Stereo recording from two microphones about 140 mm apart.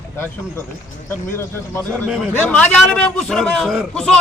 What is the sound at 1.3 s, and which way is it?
A man's voice, 15° left (ahead or behind).